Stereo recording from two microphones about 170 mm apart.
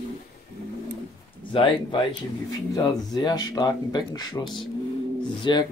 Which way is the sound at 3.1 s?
25° left (ahead or behind).